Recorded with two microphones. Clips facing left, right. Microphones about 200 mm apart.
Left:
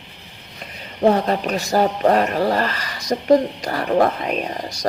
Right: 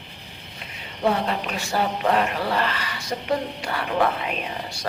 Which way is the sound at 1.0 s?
40° left (ahead or behind).